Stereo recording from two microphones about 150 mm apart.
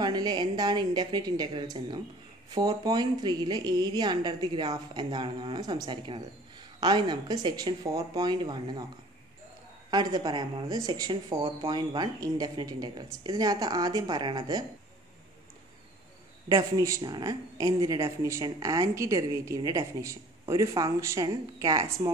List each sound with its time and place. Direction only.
0.0 s speech: 30° right (ahead or behind)
9.8 s speech: 25° right (ahead or behind)
16.5 s speech: 25° right (ahead or behind)